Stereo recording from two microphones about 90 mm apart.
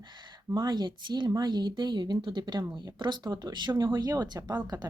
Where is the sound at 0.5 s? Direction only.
50° right (ahead or behind).